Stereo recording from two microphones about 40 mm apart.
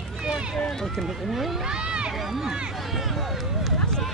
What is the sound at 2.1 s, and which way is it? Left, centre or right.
Speech, centre.